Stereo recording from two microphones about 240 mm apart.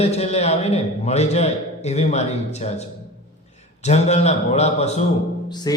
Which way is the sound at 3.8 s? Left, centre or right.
Left.